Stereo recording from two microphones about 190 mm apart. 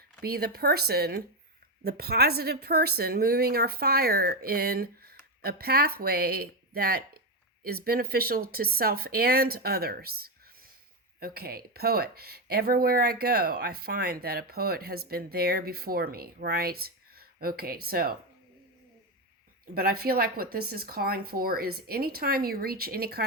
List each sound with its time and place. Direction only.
0.2 s a woman's voice: 55° right (ahead or behind)
19.7 s speech: 50° right (ahead or behind)